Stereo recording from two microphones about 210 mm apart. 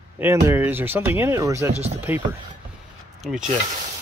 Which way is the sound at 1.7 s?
30° right (ahead or behind).